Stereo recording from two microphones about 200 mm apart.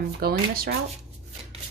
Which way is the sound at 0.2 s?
50° right (ahead or behind).